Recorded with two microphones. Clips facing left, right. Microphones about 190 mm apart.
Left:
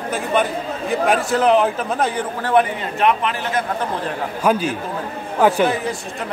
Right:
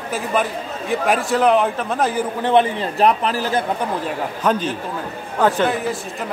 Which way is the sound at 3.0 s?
35° right (ahead or behind).